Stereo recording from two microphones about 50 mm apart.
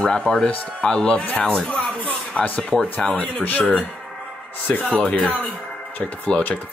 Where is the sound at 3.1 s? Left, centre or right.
Left.